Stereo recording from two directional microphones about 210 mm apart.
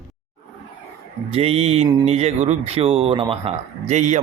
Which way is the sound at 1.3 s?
30° right (ahead or behind).